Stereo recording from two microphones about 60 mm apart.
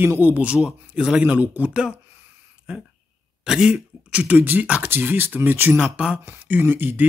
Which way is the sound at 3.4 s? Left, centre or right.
Centre.